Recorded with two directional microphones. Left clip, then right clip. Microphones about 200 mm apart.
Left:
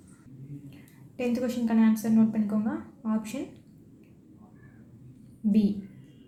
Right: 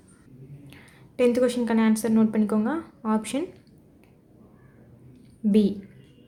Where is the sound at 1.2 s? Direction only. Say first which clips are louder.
Right 8 dB; 35° right (ahead or behind).